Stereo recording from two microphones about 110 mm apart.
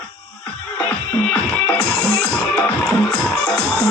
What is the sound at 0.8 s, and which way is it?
Music, 10° left (ahead or behind).